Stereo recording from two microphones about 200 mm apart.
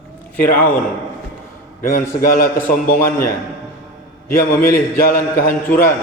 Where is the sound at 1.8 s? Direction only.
45° left (ahead or behind).